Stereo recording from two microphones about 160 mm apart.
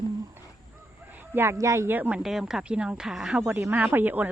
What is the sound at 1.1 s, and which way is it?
Speech, 15° right (ahead or behind).